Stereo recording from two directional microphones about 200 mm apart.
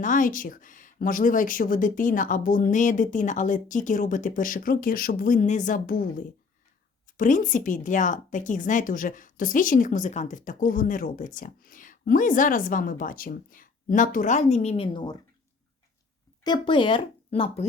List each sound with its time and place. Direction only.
0.0 s speech: 40° left (ahead or behind); by 15.2 s 20° left (ahead or behind)
16.4 s speech: 20° left (ahead or behind)